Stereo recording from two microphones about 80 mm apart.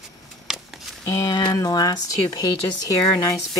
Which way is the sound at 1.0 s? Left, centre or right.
Left.